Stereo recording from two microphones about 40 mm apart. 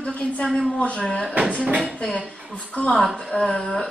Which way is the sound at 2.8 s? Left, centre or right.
Left.